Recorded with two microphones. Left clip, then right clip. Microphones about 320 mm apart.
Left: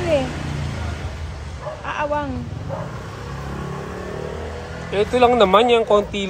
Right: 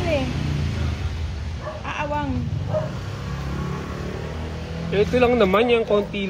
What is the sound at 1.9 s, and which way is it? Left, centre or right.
Bow-wow, left.